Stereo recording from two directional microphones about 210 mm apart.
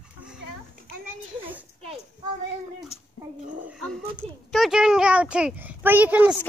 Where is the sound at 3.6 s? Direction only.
Centre (ahead or behind).